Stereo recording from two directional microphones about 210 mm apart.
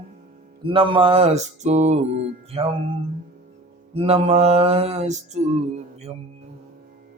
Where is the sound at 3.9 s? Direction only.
30° right (ahead or behind).